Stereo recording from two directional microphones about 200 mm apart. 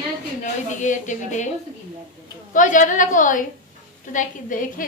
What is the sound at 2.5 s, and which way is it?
A woman's voice, 40° left (ahead or behind).